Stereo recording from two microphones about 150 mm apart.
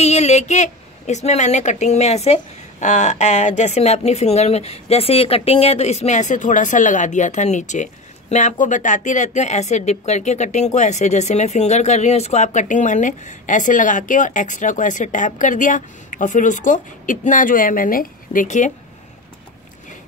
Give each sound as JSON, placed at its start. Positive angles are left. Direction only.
{"t": 0.0, "sound": "a woman's voice", "side_deg": 45}